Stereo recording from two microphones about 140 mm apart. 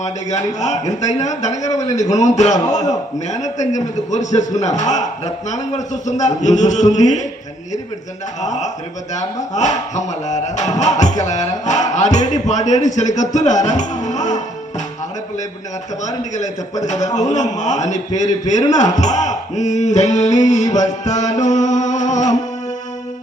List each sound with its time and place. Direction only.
0.0 s music: 55° left (ahead or behind)
8.4 s music: 55° left (ahead or behind)
16.0 s music: 60° left (ahead or behind)
16.9 s a man's voice: 25° left (ahead or behind)
17.2 s music: 55° left (ahead or behind)